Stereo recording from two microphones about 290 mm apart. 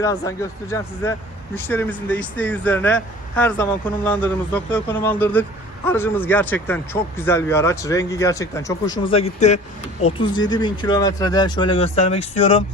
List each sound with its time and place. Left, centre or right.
0.0 s speech: centre